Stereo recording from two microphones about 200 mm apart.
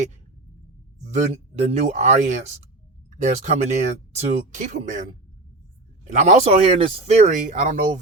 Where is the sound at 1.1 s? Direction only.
35° right (ahead or behind).